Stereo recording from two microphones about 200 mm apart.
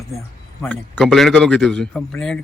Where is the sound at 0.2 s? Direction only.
5° left (ahead or behind).